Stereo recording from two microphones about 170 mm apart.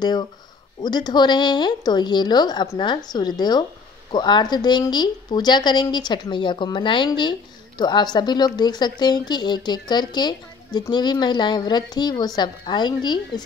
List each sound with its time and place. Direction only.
0.8 s speech: 25° left (ahead or behind)